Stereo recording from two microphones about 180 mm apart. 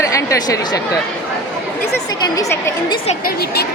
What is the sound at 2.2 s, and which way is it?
Speech, 20° left (ahead or behind).